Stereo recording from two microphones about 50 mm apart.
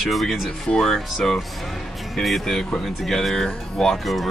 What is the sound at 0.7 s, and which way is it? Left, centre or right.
Speech, centre.